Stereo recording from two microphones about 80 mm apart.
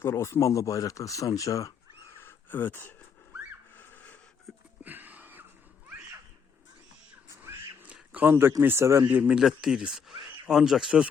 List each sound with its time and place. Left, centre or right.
0.0 s speech: left
2.1 s a sound: left
4.8 s wheeze: right
8.1 s speech: right
9.3 s speech: centre